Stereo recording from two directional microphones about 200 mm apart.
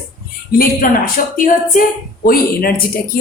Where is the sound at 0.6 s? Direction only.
45° left (ahead or behind).